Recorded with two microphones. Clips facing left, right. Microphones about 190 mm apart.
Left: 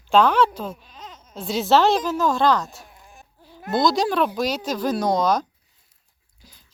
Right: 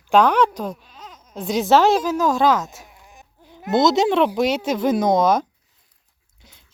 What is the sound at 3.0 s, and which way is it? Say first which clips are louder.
Sheep: right 1 dB; 20° right (ahead or behind).